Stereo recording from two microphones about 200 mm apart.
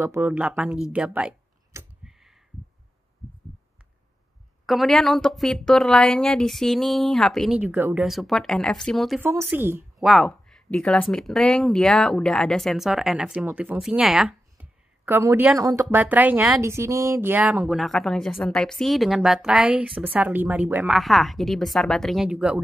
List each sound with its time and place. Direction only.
0.0 s speech: 10° right (ahead or behind)
2.0 s a sound: centre (ahead or behind)
4.6 s speech: centre (ahead or behind)
9.2 s a woman's voice: 10° right (ahead or behind)
9.9 s speech: centre (ahead or behind)